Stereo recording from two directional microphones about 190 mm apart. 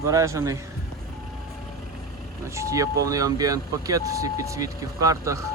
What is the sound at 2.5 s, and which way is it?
Speech, 15° right (ahead or behind).